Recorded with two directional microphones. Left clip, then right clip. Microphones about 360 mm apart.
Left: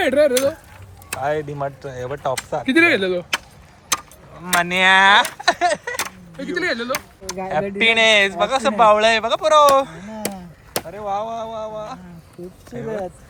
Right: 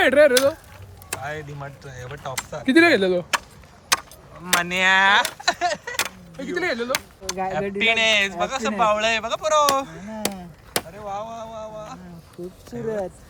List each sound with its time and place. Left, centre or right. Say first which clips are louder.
0.0 s speech: right 1 dB; centre
2.6 s speech: even; right
4.4 s speech: left 4 dB; centre
6.3 s speech: left 3 dB; right
6.9 s speech: even; centre
10.2 s chop: even; centre
10.9 s a sound: left 7 dB; centre